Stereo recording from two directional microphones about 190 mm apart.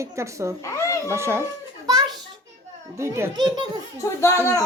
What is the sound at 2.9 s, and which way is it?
Speech, 15° right (ahead or behind).